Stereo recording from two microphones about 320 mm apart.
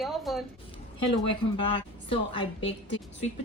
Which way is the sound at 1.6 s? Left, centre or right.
Centre.